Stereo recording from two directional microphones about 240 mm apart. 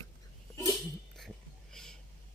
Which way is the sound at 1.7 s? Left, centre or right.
Centre.